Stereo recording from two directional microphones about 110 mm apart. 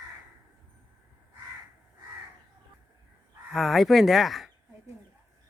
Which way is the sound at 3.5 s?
Centre (ahead or behind).